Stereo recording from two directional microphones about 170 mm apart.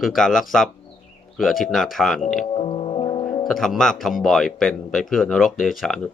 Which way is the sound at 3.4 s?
Centre (ahead or behind).